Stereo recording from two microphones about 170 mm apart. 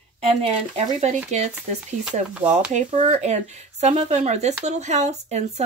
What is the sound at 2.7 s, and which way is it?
Speech, 45° right (ahead or behind).